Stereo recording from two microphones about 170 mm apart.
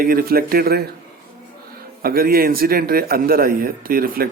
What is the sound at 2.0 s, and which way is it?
Speech, 60° right (ahead or behind).